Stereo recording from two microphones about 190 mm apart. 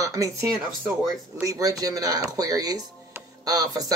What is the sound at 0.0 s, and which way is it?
Speech, 15° right (ahead or behind).